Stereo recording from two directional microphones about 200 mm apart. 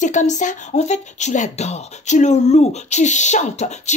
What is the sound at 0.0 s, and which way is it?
Speech, 35° left (ahead or behind).